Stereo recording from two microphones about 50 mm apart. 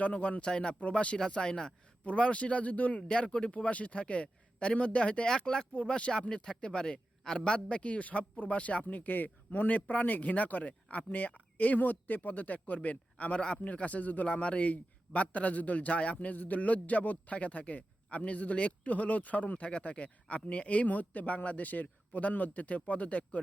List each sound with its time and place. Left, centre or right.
0.0 s a man's voice: left